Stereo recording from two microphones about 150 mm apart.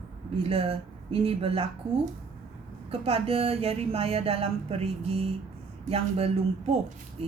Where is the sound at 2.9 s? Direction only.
40° right (ahead or behind).